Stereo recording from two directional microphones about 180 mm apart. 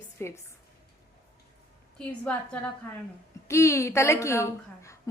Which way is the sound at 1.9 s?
5° left (ahead or behind).